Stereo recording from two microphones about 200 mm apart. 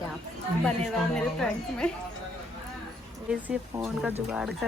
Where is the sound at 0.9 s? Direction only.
5° left (ahead or behind).